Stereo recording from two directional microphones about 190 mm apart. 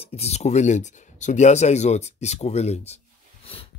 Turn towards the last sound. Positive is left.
turn(degrees=35)  # may be behind; listen again after turning